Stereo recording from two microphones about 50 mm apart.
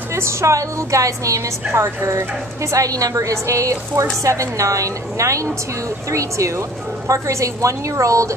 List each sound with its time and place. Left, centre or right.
0.1 s a woman's voice: right